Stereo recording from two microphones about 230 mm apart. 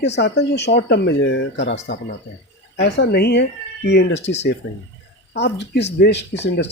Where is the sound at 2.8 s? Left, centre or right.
Left.